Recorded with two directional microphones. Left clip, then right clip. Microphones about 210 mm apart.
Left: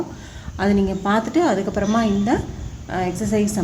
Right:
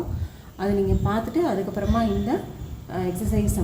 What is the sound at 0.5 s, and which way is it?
A woman's voice, 45° left (ahead or behind).